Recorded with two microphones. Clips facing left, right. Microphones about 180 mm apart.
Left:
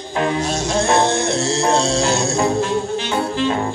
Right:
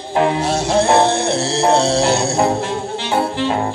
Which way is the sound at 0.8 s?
30° right (ahead or behind).